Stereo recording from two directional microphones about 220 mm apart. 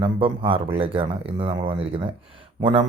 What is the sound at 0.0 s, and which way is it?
A man's voice, 25° right (ahead or behind).